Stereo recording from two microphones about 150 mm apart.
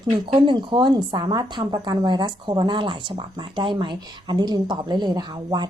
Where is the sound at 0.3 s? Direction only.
35° right (ahead or behind).